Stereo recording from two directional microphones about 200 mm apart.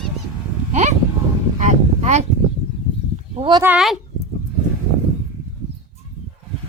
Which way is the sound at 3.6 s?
Centre (ahead or behind).